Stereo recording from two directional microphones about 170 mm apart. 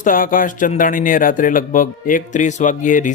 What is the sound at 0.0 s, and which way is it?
Speech, 55° left (ahead or behind).